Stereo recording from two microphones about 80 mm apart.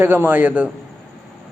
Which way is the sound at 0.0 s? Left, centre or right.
Right.